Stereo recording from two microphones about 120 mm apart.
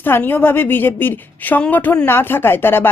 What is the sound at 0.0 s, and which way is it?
A woman's voice, 15° left (ahead or behind).